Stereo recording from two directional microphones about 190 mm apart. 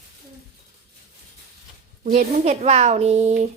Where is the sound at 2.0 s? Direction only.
40° right (ahead or behind).